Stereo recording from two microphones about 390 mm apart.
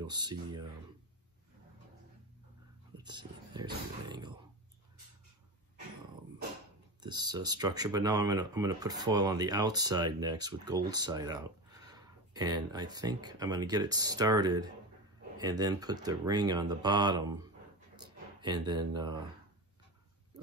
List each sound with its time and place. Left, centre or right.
0.0 s speech: centre
3.0 s speech: centre
7.0 s speech: centre
17.9 s a sound: centre